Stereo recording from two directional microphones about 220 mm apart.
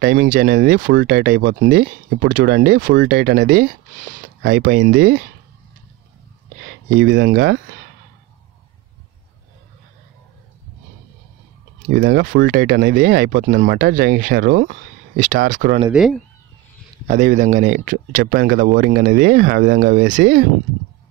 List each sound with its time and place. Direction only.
0.0 s speech: 45° right (ahead or behind)
3.0 s speech: 55° right (ahead or behind)
3.3 s speech: 40° right (ahead or behind)
7.0 s speech: 60° right (ahead or behind)
11.9 s speech: 40° right (ahead or behind)
15.9 s speech: centre (ahead or behind)
17.1 s speech: 35° right (ahead or behind)